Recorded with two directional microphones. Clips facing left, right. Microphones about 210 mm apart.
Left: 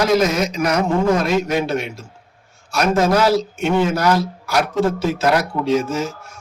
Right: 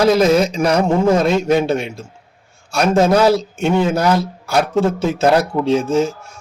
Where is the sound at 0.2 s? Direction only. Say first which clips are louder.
Right 5 dB; 30° right (ahead or behind).